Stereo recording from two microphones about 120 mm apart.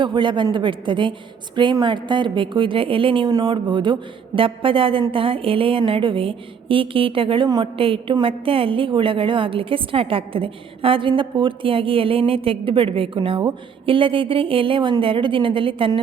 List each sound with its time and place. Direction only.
0.0 s a woman's voice: 40° right (ahead or behind)